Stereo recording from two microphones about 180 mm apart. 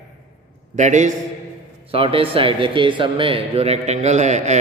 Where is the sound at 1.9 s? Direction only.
30° right (ahead or behind).